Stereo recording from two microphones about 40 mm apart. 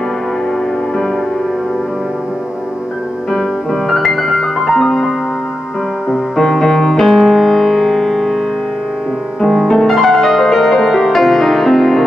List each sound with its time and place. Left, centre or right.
3.9 s music: centre
6.3 s music: centre
9.4 s music: centre